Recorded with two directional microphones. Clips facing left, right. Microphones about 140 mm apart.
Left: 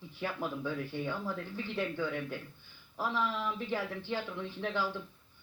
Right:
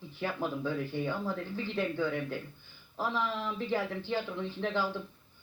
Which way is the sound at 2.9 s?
25° right (ahead or behind).